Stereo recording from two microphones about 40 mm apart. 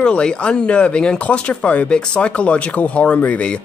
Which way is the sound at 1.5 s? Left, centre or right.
Left.